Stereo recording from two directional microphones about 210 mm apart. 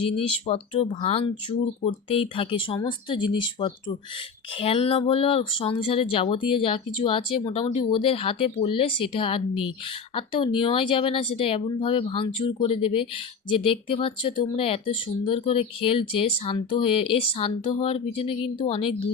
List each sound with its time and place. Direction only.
0.4 s speech: 30° left (ahead or behind)